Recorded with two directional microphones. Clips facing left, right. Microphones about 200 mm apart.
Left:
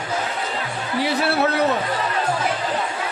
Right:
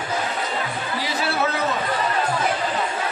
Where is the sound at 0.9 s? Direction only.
60° left (ahead or behind).